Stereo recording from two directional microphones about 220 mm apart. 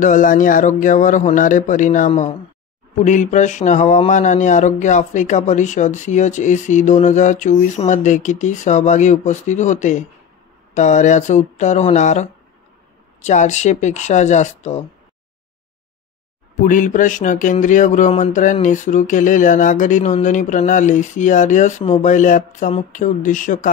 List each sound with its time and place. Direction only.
0.0 s speech: 35° left (ahead or behind)
16.5 s speech: 35° left (ahead or behind)